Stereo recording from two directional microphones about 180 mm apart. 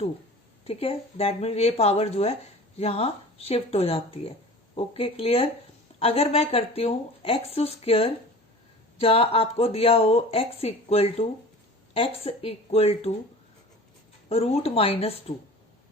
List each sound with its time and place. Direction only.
0.6 s speech: 35° left (ahead or behind)
14.3 s speech: 35° left (ahead or behind)